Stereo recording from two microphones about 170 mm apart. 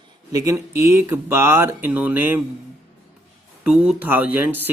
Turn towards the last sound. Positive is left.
turn(degrees=-10)  # may be behind; listen again after turning